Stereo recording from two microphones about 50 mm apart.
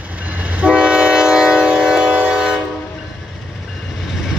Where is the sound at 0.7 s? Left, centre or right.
Centre.